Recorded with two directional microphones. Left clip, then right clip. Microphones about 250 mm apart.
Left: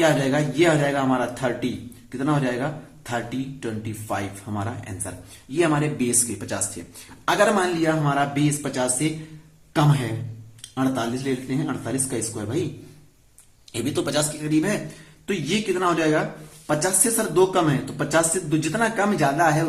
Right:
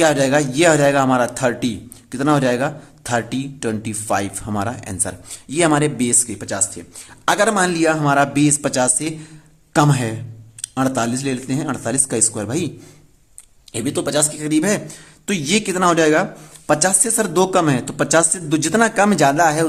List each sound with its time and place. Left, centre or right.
0.0 s speech: right
7.3 s speech: right
13.7 s speech: right